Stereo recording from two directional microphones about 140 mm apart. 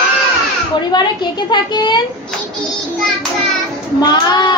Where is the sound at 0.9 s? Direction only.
30° left (ahead or behind).